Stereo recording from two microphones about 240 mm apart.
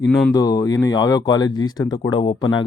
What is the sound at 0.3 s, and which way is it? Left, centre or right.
A man's voice, centre.